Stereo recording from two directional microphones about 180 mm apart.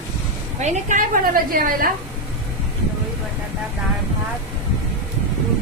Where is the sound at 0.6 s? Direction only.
45° right (ahead or behind).